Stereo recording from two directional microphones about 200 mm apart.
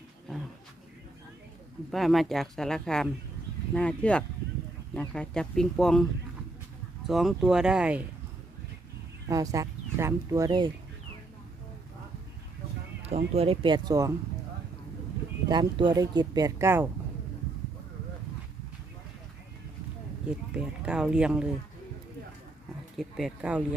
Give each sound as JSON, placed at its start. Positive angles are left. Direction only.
{"t": 1.9, "sound": "speech", "side_deg": 0}
{"t": 7.1, "sound": "speech", "side_deg": 0}
{"t": 9.2, "sound": "speech", "side_deg": -15}
{"t": 13.1, "sound": "speech", "side_deg": -30}
{"t": 15.4, "sound": "speech", "side_deg": -20}
{"t": 20.5, "sound": "speech", "side_deg": -5}
{"t": 23.0, "sound": "speech", "side_deg": 0}